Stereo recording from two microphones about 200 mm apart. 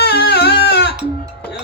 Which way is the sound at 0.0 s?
50° left (ahead or behind).